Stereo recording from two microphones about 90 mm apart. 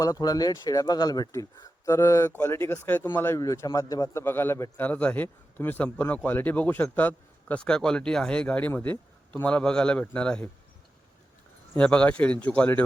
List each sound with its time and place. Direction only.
0.0 s a man's voice: 45° left (ahead or behind); by 3.3 s 25° left (ahead or behind)
3.3 s a man's voice: 35° left (ahead or behind)
4.2 s speech: 25° left (ahead or behind)
4.8 s speech: 15° left (ahead or behind)
11.7 s speech: 10° left (ahead or behind)